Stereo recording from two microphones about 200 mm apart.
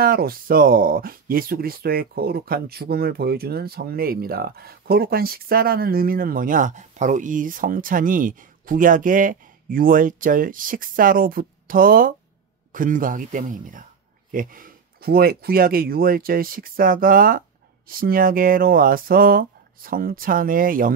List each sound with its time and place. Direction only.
0.0 s speech: 45° right (ahead or behind)